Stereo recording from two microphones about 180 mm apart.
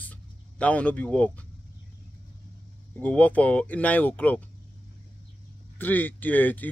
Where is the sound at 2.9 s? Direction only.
10° left (ahead or behind).